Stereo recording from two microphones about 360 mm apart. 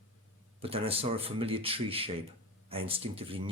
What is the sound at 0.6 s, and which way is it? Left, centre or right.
Speech, centre.